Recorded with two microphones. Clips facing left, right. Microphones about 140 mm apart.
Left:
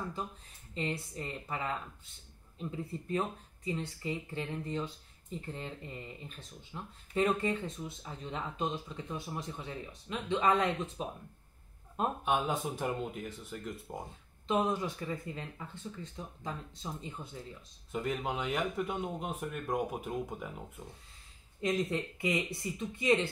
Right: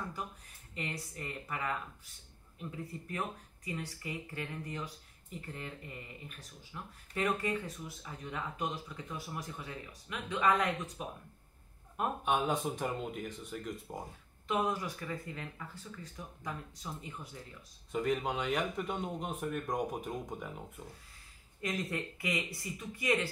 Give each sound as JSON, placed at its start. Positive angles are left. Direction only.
{"t": 0.7, "sound": "speech", "side_deg": 25}
{"t": 2.8, "sound": "speech", "side_deg": 25}
{"t": 12.3, "sound": "speech", "side_deg": 0}
{"t": 14.5, "sound": "speech", "side_deg": 20}
{"t": 17.9, "sound": "speech", "side_deg": 0}
{"t": 21.5, "sound": "speech", "side_deg": 25}